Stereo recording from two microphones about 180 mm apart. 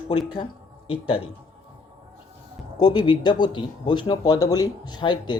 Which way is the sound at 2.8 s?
25° left (ahead or behind).